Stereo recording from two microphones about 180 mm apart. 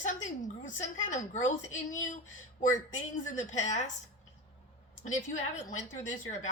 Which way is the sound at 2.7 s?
45° left (ahead or behind).